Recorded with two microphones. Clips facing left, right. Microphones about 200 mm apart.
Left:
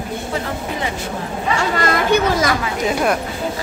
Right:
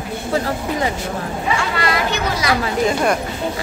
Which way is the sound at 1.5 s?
45° left (ahead or behind).